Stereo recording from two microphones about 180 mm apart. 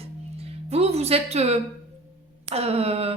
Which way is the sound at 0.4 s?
35° right (ahead or behind).